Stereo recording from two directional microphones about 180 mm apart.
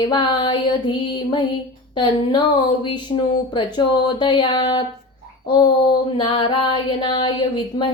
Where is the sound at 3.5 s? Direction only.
25° left (ahead or behind).